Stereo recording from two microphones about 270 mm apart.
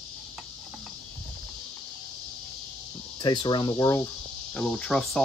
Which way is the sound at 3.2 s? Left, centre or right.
Centre.